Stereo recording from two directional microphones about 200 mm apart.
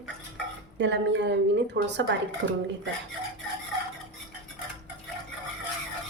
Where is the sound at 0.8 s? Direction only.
60° right (ahead or behind).